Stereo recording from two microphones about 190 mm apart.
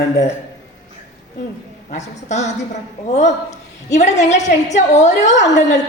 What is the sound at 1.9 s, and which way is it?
A woman's voice, 35° left (ahead or behind).